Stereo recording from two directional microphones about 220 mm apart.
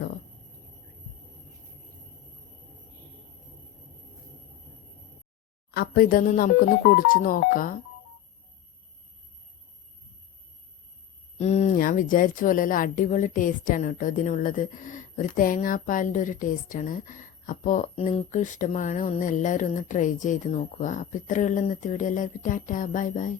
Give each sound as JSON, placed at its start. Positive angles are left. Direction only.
{"t": 5.7, "sound": "speech", "side_deg": 40}
{"t": 11.3, "sound": "speech", "side_deg": 30}